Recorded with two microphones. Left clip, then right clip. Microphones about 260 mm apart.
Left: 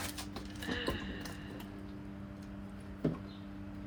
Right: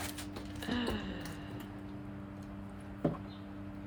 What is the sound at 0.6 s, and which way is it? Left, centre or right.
Music, centre.